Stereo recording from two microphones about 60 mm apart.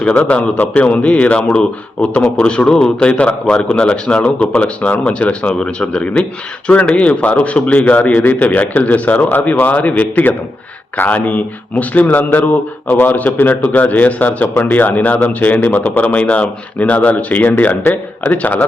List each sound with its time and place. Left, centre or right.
0.2 s a man's voice: centre